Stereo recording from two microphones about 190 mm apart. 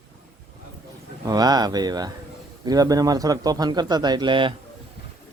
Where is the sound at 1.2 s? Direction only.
20° right (ahead or behind).